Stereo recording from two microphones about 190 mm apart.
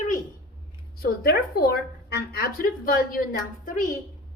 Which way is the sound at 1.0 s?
55° left (ahead or behind).